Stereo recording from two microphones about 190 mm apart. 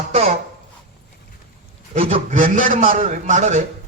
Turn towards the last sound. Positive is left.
turn(degrees=-40)  # may be behind; listen again after turning